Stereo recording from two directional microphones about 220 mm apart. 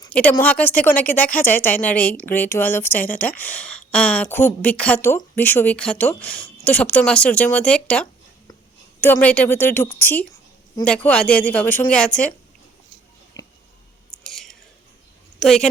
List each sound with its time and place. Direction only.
0.1 s a woman's voice: 5° left (ahead or behind)
13.4 s a sound: 15° left (ahead or behind)
14.3 s chewing: centre (ahead or behind)
15.4 s speech: centre (ahead or behind)